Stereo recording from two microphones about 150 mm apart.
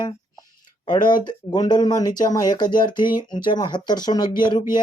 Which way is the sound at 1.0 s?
30° left (ahead or behind).